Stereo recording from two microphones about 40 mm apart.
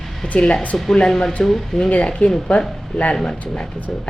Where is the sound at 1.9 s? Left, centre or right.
Left.